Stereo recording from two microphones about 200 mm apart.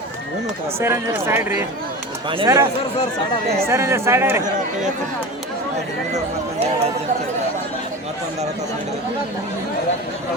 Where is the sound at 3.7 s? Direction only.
15° right (ahead or behind).